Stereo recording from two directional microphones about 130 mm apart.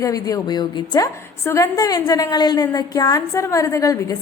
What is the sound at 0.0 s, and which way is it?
A woman's voice, 25° left (ahead or behind).